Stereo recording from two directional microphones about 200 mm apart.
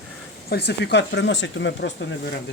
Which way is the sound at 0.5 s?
55° left (ahead or behind).